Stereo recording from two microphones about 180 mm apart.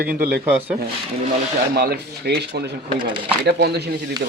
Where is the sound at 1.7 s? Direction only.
65° right (ahead or behind).